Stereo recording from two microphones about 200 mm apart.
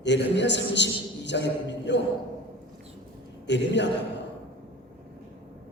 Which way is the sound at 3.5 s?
60° left (ahead or behind).